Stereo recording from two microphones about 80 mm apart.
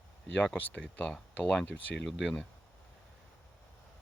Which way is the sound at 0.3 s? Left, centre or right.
Left.